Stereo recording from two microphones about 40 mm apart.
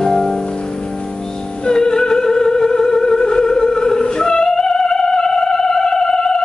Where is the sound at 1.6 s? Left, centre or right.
Centre.